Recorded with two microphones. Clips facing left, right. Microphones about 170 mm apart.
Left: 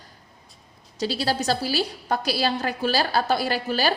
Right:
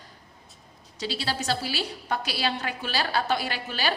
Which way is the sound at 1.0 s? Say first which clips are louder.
Left 6 dB; 40° left (ahead or behind).